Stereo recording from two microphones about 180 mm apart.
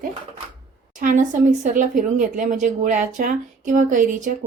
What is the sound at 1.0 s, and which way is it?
Speech, 45° right (ahead or behind).